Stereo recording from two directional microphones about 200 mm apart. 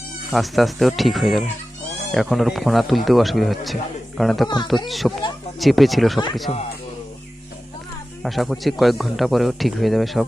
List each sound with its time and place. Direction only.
0.3 s speech: centre (ahead or behind)
6.5 s speech: 30° left (ahead or behind)
8.2 s speech: centre (ahead or behind)